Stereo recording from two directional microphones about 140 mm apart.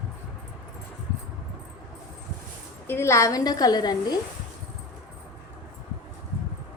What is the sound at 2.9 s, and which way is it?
A woman's voice, 20° left (ahead or behind).